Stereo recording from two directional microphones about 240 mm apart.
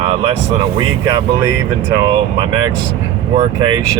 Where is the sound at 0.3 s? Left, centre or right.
Centre.